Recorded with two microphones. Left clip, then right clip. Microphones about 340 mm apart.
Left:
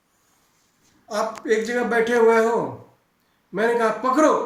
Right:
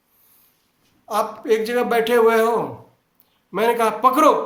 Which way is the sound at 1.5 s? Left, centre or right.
Centre.